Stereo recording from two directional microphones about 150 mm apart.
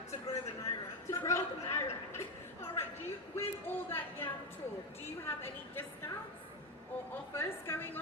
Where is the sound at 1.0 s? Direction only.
20° left (ahead or behind).